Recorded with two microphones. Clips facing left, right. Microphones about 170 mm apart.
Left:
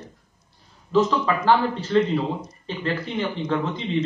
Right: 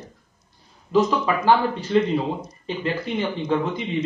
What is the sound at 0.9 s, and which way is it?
Speech, 15° right (ahead or behind).